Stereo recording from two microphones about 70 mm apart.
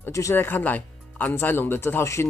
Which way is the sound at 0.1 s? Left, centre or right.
Left.